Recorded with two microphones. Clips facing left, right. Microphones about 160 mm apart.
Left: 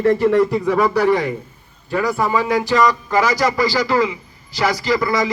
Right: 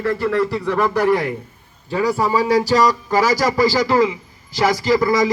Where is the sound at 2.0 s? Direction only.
30° right (ahead or behind).